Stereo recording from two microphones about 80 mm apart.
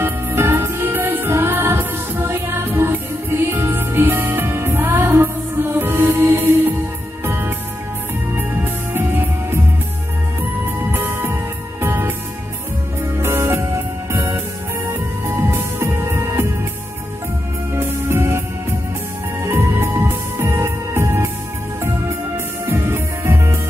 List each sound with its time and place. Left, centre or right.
0.0 s music: right
8.9 s music: right
10.8 s music: right
13.2 s music: right
17.7 s music: right
19.4 s music: right
22.7 s music: right